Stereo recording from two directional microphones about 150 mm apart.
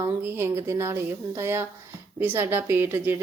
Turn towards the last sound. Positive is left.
turn(degrees=-15)  # may be behind; listen again after turning